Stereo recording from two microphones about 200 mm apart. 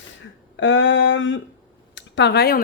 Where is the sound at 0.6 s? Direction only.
70° left (ahead or behind); by 2.6 s 50° left (ahead or behind).